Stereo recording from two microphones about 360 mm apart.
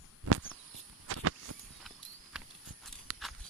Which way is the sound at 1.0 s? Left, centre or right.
Right.